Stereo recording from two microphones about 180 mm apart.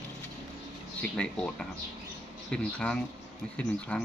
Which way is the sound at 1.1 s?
5° left (ahead or behind).